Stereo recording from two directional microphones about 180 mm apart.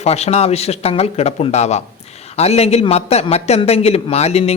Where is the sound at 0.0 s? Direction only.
35° left (ahead or behind).